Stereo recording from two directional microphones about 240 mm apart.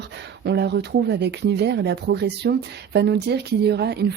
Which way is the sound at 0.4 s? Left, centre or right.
Right.